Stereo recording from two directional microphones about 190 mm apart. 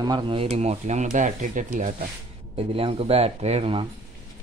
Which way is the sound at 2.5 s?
30° right (ahead or behind).